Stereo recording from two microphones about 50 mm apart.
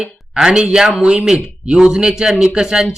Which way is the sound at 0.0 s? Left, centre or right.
Centre.